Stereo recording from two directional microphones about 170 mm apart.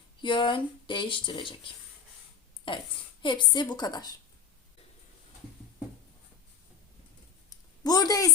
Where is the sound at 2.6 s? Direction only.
30° left (ahead or behind).